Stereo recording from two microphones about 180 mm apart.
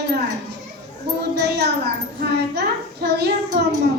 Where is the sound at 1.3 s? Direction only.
65° right (ahead or behind).